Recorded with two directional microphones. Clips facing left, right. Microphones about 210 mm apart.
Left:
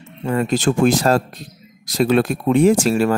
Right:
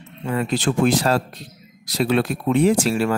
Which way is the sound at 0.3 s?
45° left (ahead or behind).